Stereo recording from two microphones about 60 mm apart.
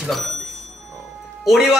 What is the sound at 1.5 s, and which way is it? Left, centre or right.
Speech, centre.